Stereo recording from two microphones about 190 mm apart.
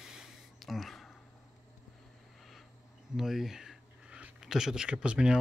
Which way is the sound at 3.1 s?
Centre (ahead or behind).